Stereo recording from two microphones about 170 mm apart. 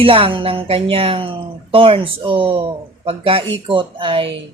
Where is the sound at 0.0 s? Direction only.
30° right (ahead or behind).